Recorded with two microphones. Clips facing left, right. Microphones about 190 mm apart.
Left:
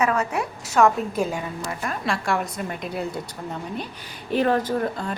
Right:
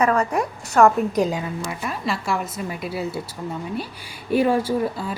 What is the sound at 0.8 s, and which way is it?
A woman's voice, centre (ahead or behind).